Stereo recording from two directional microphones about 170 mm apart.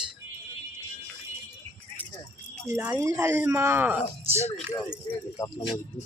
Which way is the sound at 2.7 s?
15° right (ahead or behind).